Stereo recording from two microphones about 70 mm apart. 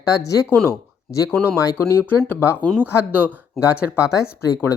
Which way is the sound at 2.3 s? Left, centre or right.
Left.